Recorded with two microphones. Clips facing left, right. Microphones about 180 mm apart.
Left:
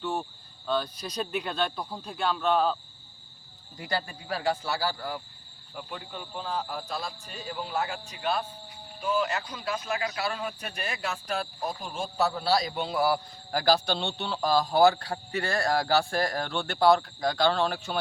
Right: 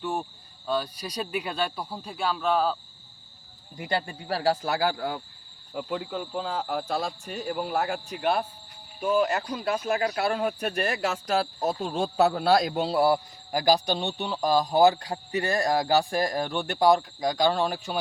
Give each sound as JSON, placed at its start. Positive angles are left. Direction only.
{"t": 0.0, "sound": "a man's voice", "side_deg": -15}
{"t": 3.8, "sound": "a man's voice", "side_deg": -25}
{"t": 4.6, "sound": "a man's voice", "side_deg": -50}
{"t": 5.7, "sound": "a man's voice", "side_deg": -90}
{"t": 11.0, "sound": "speech", "side_deg": -90}
{"t": 12.1, "sound": "speech", "side_deg": -60}
{"t": 13.5, "sound": "a man's voice", "side_deg": -15}